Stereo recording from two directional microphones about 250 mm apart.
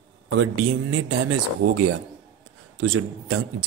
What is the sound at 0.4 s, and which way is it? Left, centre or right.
A man's voice, right.